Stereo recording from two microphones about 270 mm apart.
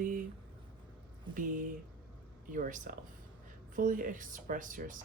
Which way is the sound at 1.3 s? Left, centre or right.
Right.